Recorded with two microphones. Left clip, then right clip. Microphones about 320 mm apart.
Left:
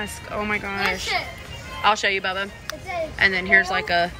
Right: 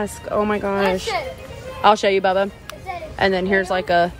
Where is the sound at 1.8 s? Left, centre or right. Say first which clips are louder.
Right 5 dB; centre.